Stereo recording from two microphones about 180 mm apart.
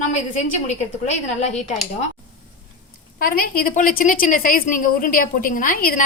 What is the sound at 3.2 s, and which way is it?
A woman's voice, 55° left (ahead or behind).